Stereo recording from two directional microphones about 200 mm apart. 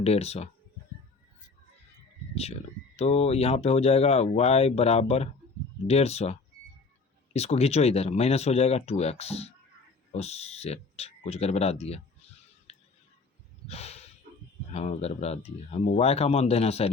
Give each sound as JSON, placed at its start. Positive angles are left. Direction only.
{"t": 0.0, "sound": "speech", "side_deg": 30}
{"t": 2.3, "sound": "speech", "side_deg": 30}
{"t": 13.7, "sound": "snort", "side_deg": 30}
{"t": 14.7, "sound": "speech", "side_deg": 30}